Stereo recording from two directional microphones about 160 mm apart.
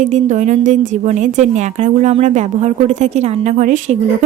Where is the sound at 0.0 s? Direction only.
50° right (ahead or behind).